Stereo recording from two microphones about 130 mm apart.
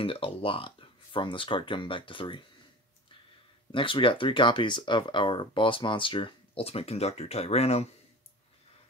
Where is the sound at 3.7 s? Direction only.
40° left (ahead or behind).